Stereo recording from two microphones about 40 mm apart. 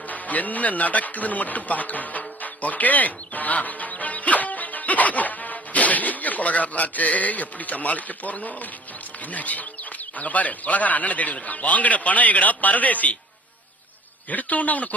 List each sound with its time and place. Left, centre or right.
0.1 s music: left
9.3 s a man's voice: left
14.3 s a man's voice: left